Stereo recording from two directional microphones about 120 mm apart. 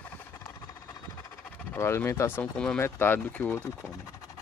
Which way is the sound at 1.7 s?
20° left (ahead or behind).